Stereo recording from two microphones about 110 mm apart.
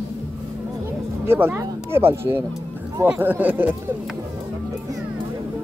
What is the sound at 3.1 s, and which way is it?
Speech, 15° right (ahead or behind).